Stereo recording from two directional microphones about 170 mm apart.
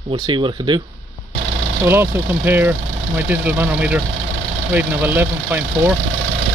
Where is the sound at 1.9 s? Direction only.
15° right (ahead or behind).